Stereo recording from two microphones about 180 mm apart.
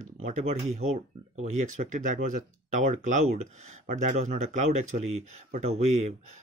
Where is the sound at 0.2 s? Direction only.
40° right (ahead or behind).